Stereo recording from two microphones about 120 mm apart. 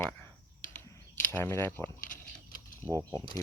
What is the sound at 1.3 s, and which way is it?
Speech, 20° left (ahead or behind).